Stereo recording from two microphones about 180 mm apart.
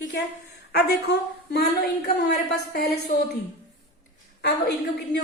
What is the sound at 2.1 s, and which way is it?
Speech, 50° left (ahead or behind).